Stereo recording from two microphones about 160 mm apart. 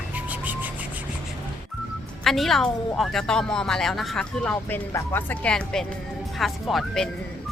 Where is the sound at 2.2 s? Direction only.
Centre (ahead or behind).